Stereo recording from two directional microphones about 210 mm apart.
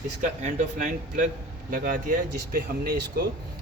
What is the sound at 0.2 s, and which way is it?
A man's voice, 35° right (ahead or behind).